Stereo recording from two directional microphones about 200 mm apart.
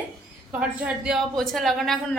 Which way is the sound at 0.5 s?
5° right (ahead or behind).